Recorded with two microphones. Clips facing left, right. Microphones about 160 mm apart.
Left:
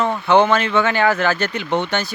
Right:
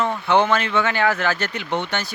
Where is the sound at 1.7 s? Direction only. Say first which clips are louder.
Left 4 dB; 90° left.